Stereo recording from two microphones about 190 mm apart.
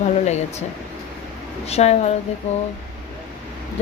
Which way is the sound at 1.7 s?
35° left (ahead or behind).